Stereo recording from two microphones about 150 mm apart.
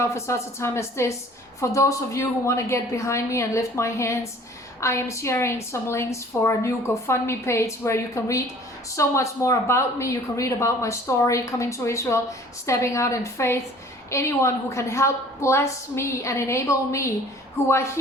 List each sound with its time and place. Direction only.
0.0 s a woman's voice: 20° left (ahead or behind)